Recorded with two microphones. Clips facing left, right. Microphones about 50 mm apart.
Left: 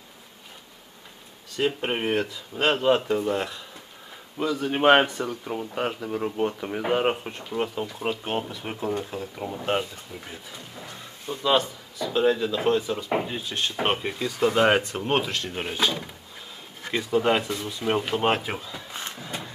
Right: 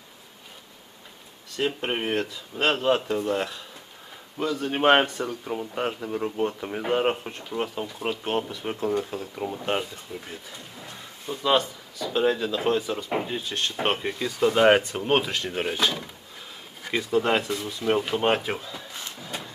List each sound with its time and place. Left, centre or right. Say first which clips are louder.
1.5 s speech: left 1 dB; centre
18.9 s vehicle: left 3 dB; left
19.2 s a sound: left 1 dB; centre